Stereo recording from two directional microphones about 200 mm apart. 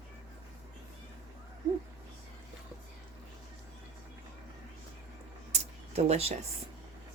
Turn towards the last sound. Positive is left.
turn(degrees=-30)  # may be behind; listen again after turning